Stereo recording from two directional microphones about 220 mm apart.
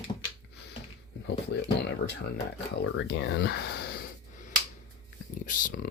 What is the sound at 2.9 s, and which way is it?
Speech, 55° left (ahead or behind).